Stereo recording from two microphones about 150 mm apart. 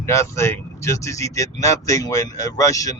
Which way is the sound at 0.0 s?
20° left (ahead or behind).